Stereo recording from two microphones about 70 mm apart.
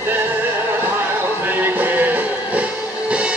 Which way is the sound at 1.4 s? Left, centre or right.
Right.